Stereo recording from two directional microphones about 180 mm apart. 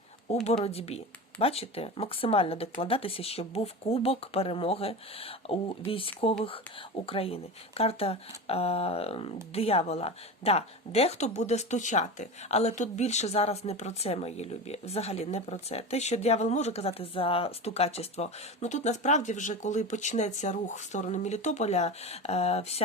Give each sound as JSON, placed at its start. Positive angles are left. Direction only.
{"t": 0.3, "sound": "speech", "side_deg": 35}